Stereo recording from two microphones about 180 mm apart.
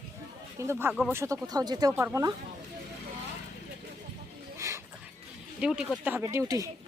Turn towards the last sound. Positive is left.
turn(degrees=-15)  # may be behind; listen again after turning